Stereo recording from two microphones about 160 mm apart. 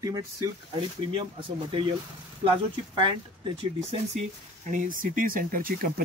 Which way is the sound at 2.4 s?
35° right (ahead or behind).